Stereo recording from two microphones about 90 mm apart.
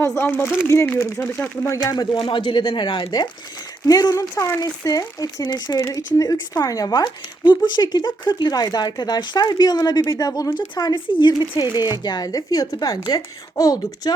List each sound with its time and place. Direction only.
0.0 s speech: 30° left (ahead or behind)
1.8 s speech: 45° left (ahead or behind)
2.1 s speech: 70° left (ahead or behind)
3.8 s speech: 45° left (ahead or behind)
5.8 s speech: 40° left (ahead or behind)
7.0 s speech: 60° left (ahead or behind)
10.9 s speech: 65° left (ahead or behind); by 14.1 s 45° left (ahead or behind)